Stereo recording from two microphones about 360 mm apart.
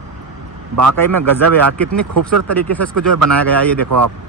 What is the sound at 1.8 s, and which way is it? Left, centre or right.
Speech, right.